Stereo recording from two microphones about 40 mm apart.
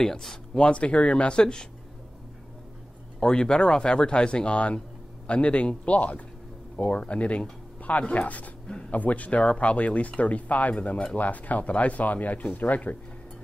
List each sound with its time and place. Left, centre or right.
0.0 s speech: centre
0.6 s speech: left
3.2 s speech: centre; by 12.9 s left